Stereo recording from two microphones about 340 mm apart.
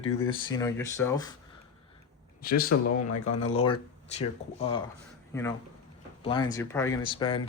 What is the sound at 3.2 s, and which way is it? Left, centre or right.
Speech, left.